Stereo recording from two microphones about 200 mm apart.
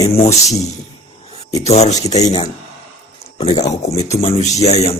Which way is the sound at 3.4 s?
25° left (ahead or behind).